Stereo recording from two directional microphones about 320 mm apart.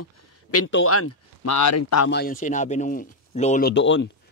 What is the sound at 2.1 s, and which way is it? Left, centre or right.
Speech, left.